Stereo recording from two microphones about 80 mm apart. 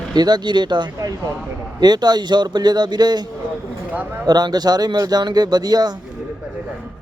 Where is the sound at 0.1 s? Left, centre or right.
Right.